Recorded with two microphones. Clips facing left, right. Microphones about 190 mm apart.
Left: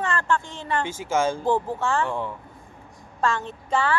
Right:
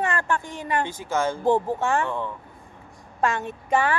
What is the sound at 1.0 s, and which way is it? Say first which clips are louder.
Speech: left 2 dB; 10° left (ahead or behind).